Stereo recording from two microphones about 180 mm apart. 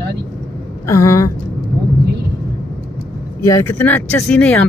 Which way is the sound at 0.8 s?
15° left (ahead or behind).